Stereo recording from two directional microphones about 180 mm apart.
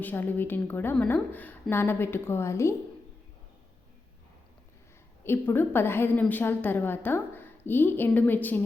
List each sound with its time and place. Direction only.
0.0 s a woman's voice: 10° left (ahead or behind)
5.2 s a woman's voice: 10° left (ahead or behind)